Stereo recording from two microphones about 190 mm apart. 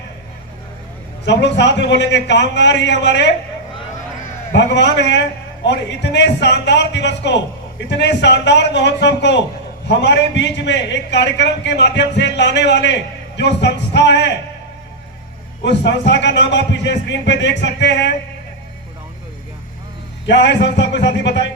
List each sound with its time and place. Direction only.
1.2 s a man's voice: 65° left (ahead or behind)
4.5 s a man's voice: 65° left (ahead or behind)
15.8 s a man's voice: 65° left (ahead or behind)
20.2 s a man's voice: 65° left (ahead or behind)